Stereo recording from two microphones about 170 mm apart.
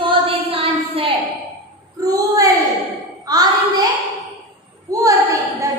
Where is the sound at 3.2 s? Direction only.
20° right (ahead or behind).